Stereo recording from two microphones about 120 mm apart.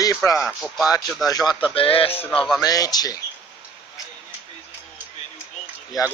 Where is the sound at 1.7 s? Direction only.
50° left (ahead or behind).